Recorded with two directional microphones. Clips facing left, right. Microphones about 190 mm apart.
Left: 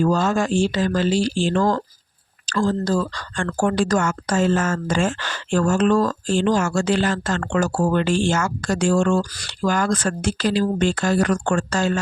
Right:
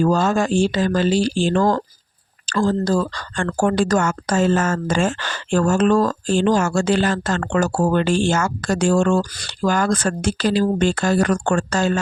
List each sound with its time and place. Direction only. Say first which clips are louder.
0.0 s speech: right 2 dB; 40° right (ahead or behind)